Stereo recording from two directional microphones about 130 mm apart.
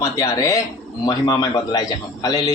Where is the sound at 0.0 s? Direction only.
25° left (ahead or behind).